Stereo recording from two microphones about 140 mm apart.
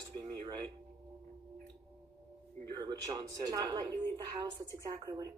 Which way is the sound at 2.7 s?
30° right (ahead or behind).